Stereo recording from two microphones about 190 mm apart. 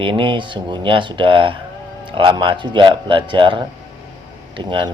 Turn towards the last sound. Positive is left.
turn(degrees=-25)  # may be behind; listen again after turning